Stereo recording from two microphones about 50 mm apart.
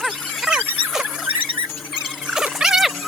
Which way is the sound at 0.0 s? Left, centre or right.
Centre.